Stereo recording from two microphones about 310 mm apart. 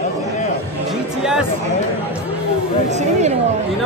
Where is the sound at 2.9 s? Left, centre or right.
Right.